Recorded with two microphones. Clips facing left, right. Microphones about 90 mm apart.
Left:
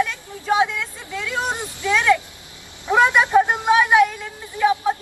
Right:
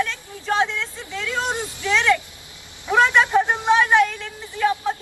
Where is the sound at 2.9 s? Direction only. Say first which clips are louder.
Left 1 dB; 20° left (ahead or behind).